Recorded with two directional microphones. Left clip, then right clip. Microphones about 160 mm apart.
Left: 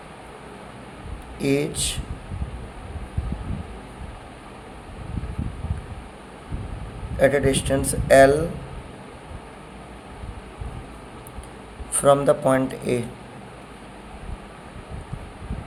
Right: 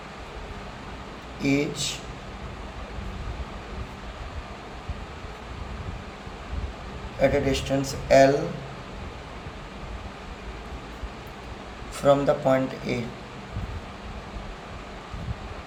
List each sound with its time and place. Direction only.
1.4 s speech: 55° left (ahead or behind)
7.2 s speech: 50° left (ahead or behind)
12.0 s speech: 45° left (ahead or behind)